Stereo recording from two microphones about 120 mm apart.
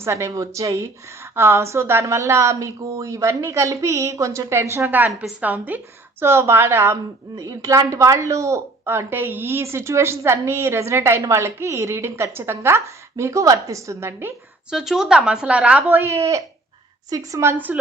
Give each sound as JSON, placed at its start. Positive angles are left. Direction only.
{"t": 0.0, "sound": "a woman's voice", "side_deg": -25}
{"t": 14.7, "sound": "a woman's voice", "side_deg": -5}